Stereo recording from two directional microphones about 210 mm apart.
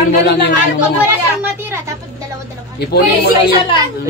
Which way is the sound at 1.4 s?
10° right (ahead or behind).